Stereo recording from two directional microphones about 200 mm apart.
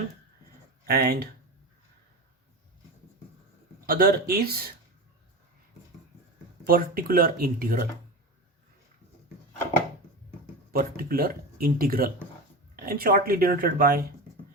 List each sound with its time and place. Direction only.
0.9 s speech: 50° right (ahead or behind)
3.8 s speech: 50° right (ahead or behind)
6.7 s speech: 45° right (ahead or behind)
10.7 s speech: 50° right (ahead or behind)